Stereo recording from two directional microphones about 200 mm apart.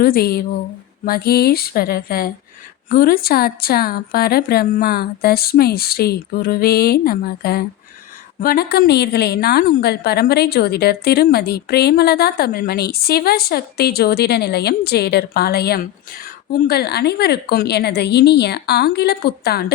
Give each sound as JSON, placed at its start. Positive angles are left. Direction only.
{"t": 0.0, "sound": "a woman's voice", "side_deg": 50}